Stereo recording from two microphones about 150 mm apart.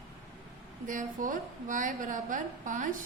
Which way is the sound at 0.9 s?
60° right (ahead or behind).